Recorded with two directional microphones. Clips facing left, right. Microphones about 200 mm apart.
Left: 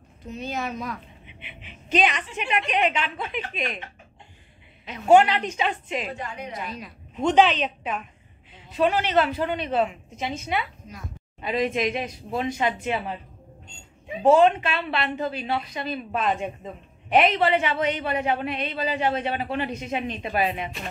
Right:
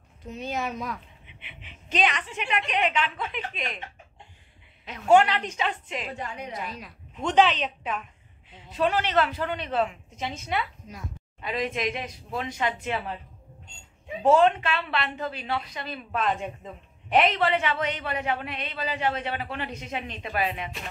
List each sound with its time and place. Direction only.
0.5 s speech: 10° right (ahead or behind)
1.9 s a woman's voice: 10° left (ahead or behind)
2.4 s a woman's voice: 20° left (ahead or behind)
5.0 s a woman's voice: 15° left (ahead or behind)
7.2 s a woman's voice: 20° left (ahead or behind)
9.1 s a woman's voice: 20° left (ahead or behind)
11.4 s a woman's voice: 20° left (ahead or behind)
14.2 s a woman's voice: 10° left (ahead or behind)